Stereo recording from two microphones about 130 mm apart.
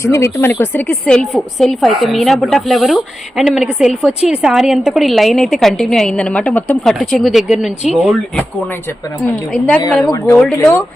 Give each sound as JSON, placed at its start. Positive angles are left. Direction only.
{"t": 0.0, "sound": "a woman's voice", "side_deg": 20}
{"t": 9.5, "sound": "speech", "side_deg": 10}